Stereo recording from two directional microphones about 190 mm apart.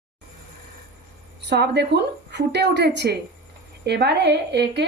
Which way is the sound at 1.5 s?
60° right (ahead or behind).